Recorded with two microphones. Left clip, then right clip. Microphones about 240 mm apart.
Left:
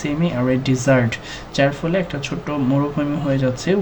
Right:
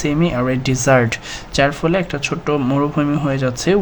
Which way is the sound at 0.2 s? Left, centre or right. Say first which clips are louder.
Right 2 dB; right.